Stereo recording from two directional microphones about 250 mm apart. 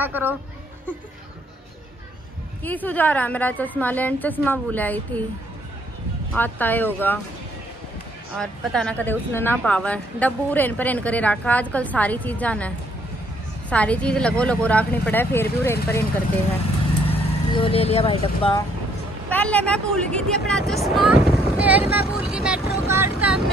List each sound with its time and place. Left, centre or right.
0.0 s speech: centre
2.6 s a woman's voice: centre
6.3 s a woman's voice: centre
8.4 s speech: centre
17.1 s speech: left
19.2 s speech: centre